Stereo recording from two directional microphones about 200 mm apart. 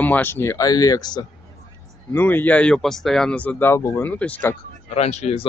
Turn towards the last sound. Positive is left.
turn(degrees=35)  # may be behind; listen again after turning